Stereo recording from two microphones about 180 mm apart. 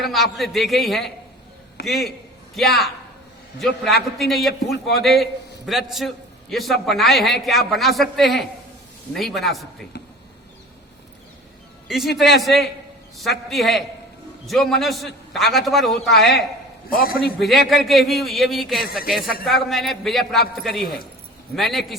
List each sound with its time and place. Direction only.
0.0 s a man's voice: centre (ahead or behind)
4.2 s a man's voice: centre (ahead or behind)
11.9 s a man's voice: centre (ahead or behind)
16.9 s a man's voice: 55° left (ahead or behind)
17.4 s a man's voice: centre (ahead or behind)
21.5 s a man's voice: centre (ahead or behind)